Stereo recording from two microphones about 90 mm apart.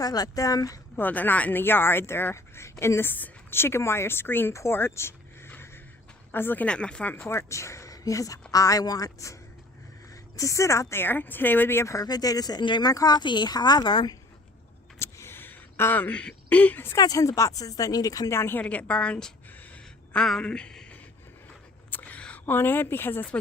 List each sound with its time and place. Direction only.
0.0 s speech: 45° left (ahead or behind)
0.9 s speech: 20° left (ahead or behind)
7.2 s a woman's voice: 30° left (ahead or behind)
12.0 s speech: 45° left (ahead or behind)
12.9 s speech: 45° left (ahead or behind)
14.9 s a sound: 30° left (ahead or behind)
17.0 s speech: 45° left (ahead or behind)
18.3 s a woman's voice: 25° left (ahead or behind)
18.6 s a sound: 15° left (ahead or behind)
20.2 s speech: 5° left (ahead or behind)
21.8 s a sound: 20° left (ahead or behind)